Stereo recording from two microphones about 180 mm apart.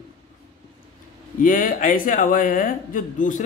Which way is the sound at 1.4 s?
50° left (ahead or behind).